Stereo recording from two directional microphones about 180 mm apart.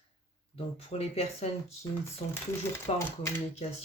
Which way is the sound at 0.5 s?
35° left (ahead or behind).